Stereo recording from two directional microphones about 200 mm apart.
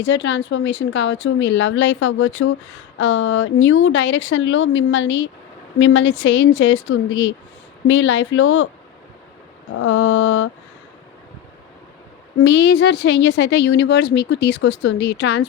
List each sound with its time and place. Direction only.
0.0 s a woman's voice: 65° left (ahead or behind); by 8.7 s 85° left
9.8 s mantra: 90° left
12.4 s a woman's voice: 65° left (ahead or behind)